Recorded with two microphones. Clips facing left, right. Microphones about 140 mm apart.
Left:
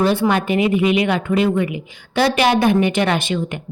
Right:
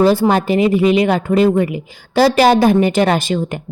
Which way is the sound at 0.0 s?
40° right (ahead or behind).